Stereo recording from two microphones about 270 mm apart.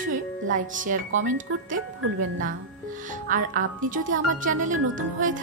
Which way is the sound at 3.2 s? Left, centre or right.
Right.